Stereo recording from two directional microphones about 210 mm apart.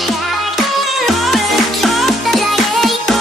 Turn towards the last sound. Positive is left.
turn(degrees=0)  # may be behind; listen again after turning